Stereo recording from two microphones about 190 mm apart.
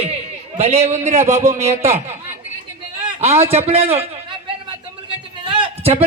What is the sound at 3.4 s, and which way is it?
Speech, 30° right (ahead or behind).